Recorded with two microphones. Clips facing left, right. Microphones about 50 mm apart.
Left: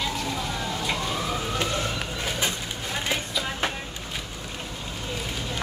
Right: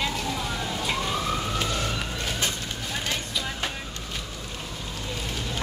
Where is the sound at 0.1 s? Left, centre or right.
Centre.